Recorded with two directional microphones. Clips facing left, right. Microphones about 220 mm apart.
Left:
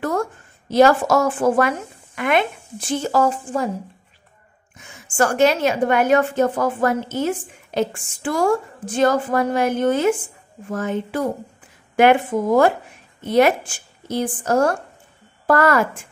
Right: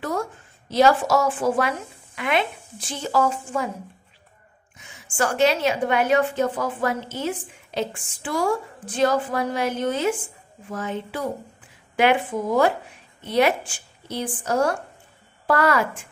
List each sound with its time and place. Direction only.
0.7 s a woman's voice: 50° left (ahead or behind)
4.7 s a woman's voice: 50° left (ahead or behind)